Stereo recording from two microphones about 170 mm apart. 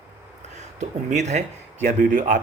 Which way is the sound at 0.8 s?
45° right (ahead or behind).